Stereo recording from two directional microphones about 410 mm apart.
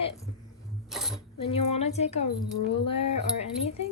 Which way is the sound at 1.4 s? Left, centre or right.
Centre.